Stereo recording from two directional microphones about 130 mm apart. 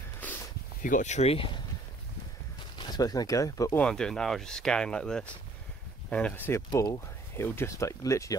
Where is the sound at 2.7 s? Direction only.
30° left (ahead or behind).